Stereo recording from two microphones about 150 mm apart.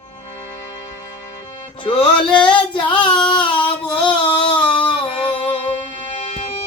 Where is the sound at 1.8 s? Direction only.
35° left (ahead or behind).